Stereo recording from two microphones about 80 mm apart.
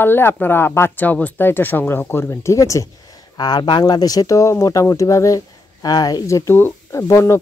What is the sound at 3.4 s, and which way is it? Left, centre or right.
Speech, left.